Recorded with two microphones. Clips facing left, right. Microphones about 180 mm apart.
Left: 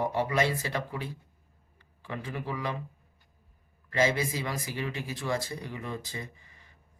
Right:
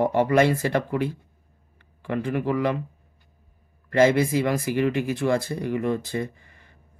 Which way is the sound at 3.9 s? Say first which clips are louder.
Right 9 dB; 55° right (ahead or behind).